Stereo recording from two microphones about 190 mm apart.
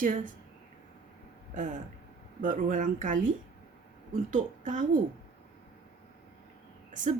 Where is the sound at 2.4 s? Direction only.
45° right (ahead or behind).